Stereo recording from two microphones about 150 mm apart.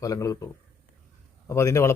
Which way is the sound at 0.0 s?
20° left (ahead or behind).